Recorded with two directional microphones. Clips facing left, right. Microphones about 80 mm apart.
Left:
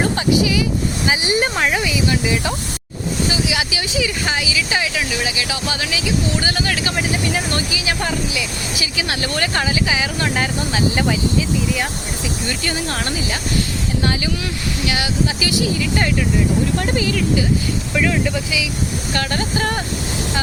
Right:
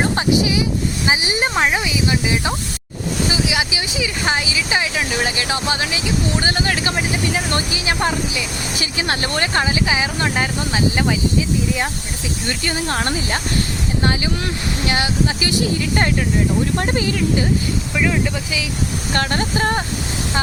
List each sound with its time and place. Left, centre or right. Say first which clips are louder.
0.0 s a sound: even; right
1.0 s speech: left 1 dB; right
5.1 s speech: right 2 dB; right
10.2 s speech: left 1 dB; centre
10.7 s speech: even; right
12.5 s speech: right 3 dB; right
16.7 s speech: even; right
17.9 s speech: left 1 dB; centre
19.1 s speech: right 2 dB; right